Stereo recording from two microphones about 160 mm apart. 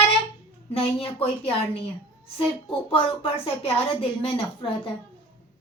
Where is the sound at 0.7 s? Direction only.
35° left (ahead or behind).